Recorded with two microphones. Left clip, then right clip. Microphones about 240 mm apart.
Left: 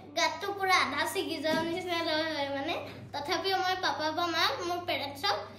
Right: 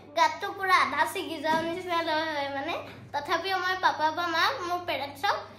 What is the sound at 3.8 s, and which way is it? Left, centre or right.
Female singing, centre.